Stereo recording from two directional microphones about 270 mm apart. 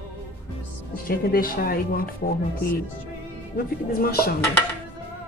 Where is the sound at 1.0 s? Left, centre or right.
Left.